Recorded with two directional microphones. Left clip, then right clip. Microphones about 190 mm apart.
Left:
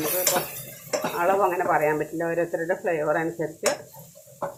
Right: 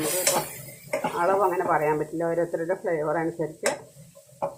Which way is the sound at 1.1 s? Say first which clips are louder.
Left 1 dB; 5° left (ahead or behind).